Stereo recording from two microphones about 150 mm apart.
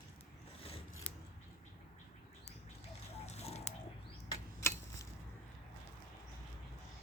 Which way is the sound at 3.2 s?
45° left (ahead or behind).